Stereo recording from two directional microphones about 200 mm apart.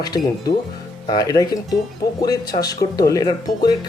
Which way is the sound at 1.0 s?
20° left (ahead or behind).